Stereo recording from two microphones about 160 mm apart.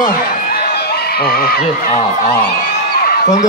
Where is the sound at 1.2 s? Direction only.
75° left (ahead or behind).